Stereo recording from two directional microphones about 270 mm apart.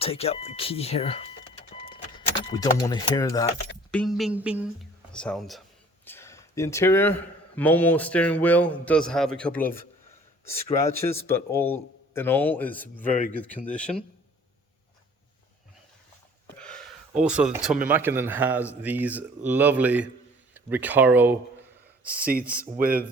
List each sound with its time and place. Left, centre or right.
0.0 s speech: left
3.9 s a man's voice: centre
10.8 s a man's voice: centre
16.6 s a sound: centre
17.8 s speech: centre
22.3 s speech: right